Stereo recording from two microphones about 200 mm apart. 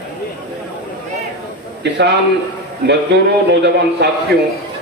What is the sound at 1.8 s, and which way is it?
A man's voice, 60° right (ahead or behind).